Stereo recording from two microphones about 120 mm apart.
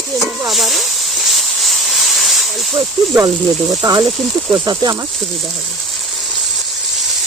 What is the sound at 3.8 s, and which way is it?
Speech, 30° right (ahead or behind).